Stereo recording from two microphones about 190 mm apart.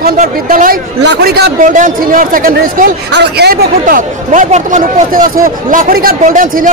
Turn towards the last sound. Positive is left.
turn(degrees=-45)  # may be behind; listen again after turning